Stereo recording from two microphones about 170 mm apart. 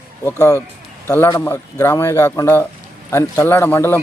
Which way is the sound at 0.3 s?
15° left (ahead or behind).